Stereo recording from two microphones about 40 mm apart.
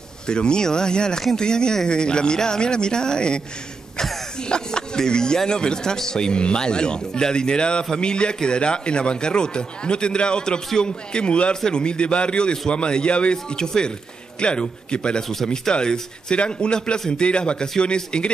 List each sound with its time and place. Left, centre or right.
0.3 s speech: left
4.5 s speech: centre
15.2 s speech: centre; by 18.3 s left